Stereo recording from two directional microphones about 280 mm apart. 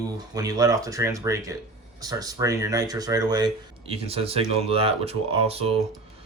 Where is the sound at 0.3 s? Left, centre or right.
Centre.